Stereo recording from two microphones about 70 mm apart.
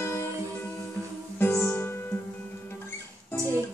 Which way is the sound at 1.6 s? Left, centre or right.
Left.